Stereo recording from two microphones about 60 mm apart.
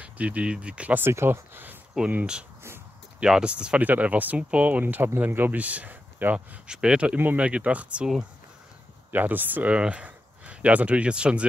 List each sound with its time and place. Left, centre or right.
0.0 s speech: right
1.1 s speech: right
3.2 s speech: centre
6.3 s speech: centre
9.1 s speech: right; by 11.4 s centre